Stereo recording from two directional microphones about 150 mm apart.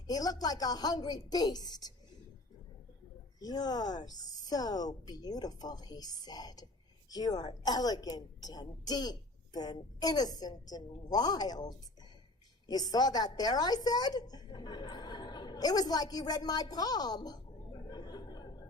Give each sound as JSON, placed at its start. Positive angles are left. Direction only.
{"t": 0.1, "sound": "a woman's voice", "side_deg": 25}
{"t": 3.4, "sound": "a woman's voice", "side_deg": 25}
{"t": 17.8, "sound": "a sound", "side_deg": 30}